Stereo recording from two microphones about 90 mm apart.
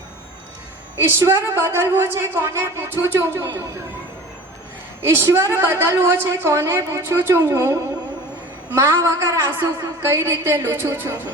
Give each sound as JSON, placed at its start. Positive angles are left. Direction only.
{"t": 1.2, "sound": "a woman's voice", "side_deg": -30}
{"t": 5.0, "sound": "a woman's voice", "side_deg": -25}